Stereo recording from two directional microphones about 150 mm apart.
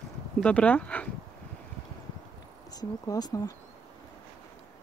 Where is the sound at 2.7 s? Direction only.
25° left (ahead or behind).